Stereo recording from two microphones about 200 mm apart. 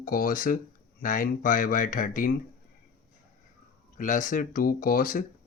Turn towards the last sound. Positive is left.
turn(degrees=45)  # may be behind; listen again after turning